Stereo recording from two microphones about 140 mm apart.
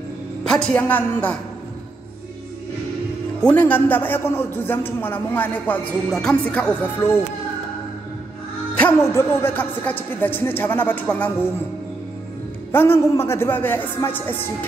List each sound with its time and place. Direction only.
0.4 s a man's voice: 5° left (ahead or behind)
3.3 s a man's voice: 10° left (ahead or behind)
8.7 s a man's voice: 15° left (ahead or behind)
12.7 s a man's voice: 15° left (ahead or behind)